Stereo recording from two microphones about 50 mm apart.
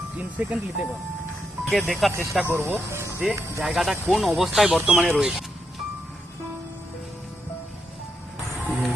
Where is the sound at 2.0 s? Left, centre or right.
Centre.